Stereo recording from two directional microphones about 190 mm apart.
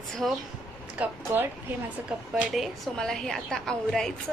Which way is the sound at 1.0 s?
10° right (ahead or behind).